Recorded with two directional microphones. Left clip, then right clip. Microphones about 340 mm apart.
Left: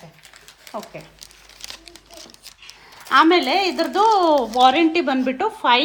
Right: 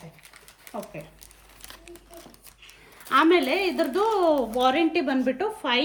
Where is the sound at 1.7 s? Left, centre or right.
Centre.